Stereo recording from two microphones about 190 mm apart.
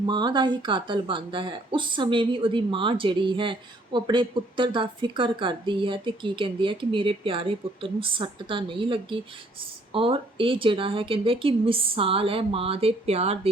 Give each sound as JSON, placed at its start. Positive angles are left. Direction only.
{"t": 0.0, "sound": "speech", "side_deg": -25}